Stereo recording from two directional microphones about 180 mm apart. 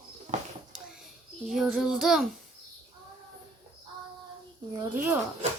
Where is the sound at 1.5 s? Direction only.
Centre (ahead or behind).